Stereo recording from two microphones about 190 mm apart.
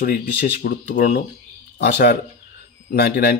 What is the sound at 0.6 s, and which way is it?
Speech, 45° left (ahead or behind).